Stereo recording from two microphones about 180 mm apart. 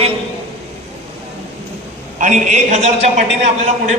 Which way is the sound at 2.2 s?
40° right (ahead or behind).